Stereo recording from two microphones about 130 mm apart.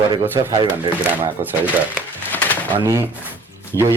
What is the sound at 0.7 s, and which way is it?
Speech, 15° right (ahead or behind).